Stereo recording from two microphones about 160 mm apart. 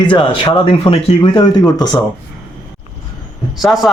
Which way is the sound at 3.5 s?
Centre (ahead or behind).